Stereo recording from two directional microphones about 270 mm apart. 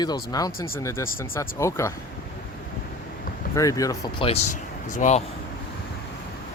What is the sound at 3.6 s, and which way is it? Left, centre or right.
Speech, centre.